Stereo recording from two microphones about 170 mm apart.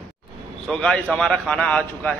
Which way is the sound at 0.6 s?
5° left (ahead or behind).